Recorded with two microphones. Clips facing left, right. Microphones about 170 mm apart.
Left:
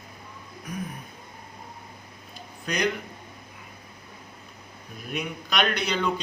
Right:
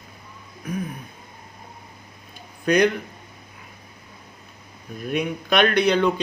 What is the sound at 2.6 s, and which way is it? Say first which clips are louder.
Speech: right 9 dB; 55° right (ahead or behind).